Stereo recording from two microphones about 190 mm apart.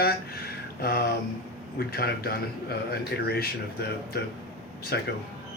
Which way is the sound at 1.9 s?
55° left (ahead or behind).